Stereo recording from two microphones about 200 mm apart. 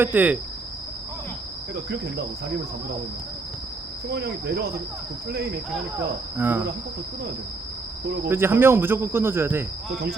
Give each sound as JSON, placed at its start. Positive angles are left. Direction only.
{"t": 0.0, "sound": "speech", "side_deg": -10}
{"t": 4.1, "sound": "cricket", "side_deg": -55}
{"t": 6.3, "sound": "speech", "side_deg": -10}
{"t": 8.0, "sound": "cricket", "side_deg": -50}
{"t": 8.3, "sound": "speech", "side_deg": -10}